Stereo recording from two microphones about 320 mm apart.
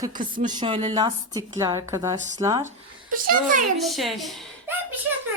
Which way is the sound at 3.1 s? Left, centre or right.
Right.